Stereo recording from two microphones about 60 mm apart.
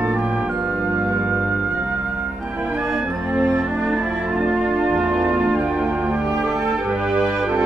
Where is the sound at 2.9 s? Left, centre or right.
Centre.